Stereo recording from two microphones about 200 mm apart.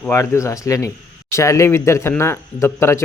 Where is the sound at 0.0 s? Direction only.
15° left (ahead or behind).